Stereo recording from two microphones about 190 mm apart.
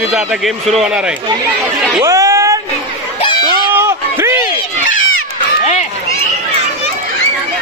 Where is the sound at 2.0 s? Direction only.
15° right (ahead or behind).